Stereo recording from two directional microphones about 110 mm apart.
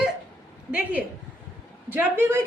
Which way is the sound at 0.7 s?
15° right (ahead or behind).